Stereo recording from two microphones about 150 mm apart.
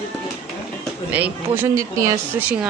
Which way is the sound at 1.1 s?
10° right (ahead or behind).